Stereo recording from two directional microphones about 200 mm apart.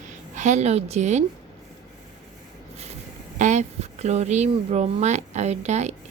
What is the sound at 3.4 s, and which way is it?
A woman's voice, 35° right (ahead or behind).